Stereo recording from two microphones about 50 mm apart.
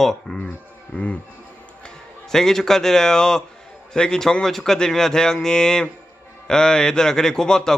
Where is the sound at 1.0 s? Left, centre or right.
Left.